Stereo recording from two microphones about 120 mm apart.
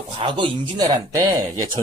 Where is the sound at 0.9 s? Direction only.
30° right (ahead or behind).